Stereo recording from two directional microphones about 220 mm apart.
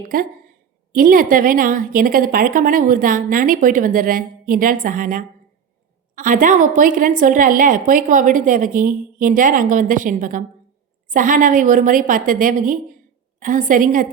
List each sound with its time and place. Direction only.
0.1 s a woman's voice: 40° right (ahead or behind)